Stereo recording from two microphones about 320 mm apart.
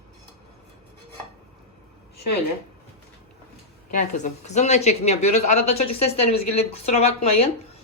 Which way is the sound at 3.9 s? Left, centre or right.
Left.